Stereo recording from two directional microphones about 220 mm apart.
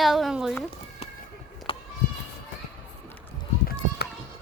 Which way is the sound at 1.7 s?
25° left (ahead or behind).